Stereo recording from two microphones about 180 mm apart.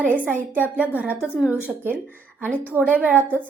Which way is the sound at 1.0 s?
5° right (ahead or behind).